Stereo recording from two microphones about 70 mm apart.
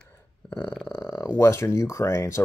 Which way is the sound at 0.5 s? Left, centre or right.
Left.